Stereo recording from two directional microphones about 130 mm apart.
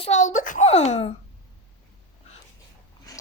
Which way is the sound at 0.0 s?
65° left (ahead or behind).